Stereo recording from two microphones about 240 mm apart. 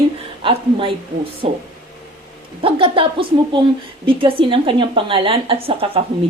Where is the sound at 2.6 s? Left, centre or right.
Right.